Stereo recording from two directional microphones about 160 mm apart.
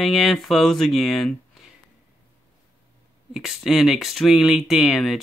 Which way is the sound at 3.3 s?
5° right (ahead or behind).